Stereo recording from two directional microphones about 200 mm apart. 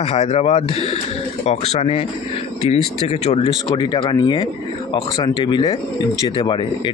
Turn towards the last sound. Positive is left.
turn(degrees=25)  # may be behind; listen again after turning